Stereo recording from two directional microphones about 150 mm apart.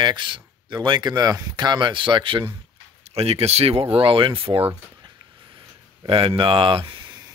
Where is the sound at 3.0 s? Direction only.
45° right (ahead or behind).